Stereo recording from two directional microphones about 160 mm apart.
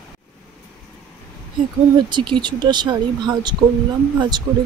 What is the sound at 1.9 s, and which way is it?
Speech, 30° right (ahead or behind).